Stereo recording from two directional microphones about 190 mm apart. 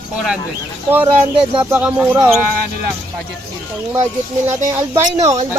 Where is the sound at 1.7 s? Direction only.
5° right (ahead or behind).